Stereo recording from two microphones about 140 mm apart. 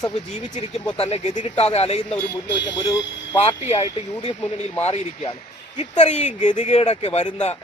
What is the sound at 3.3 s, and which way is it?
Speech, 45° left (ahead or behind).